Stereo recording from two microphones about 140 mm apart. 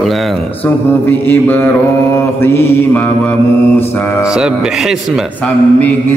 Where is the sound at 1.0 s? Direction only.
15° left (ahead or behind).